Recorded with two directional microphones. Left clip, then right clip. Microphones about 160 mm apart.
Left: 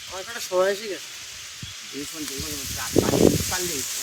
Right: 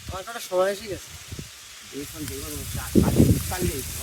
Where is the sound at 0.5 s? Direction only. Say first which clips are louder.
Left 1 dB; 60° right (ahead or behind).